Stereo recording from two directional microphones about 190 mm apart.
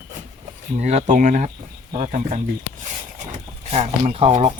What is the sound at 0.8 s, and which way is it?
Speech, 40° right (ahead or behind).